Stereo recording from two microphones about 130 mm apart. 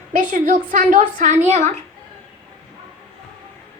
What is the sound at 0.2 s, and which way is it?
A woman's voice, 90° right.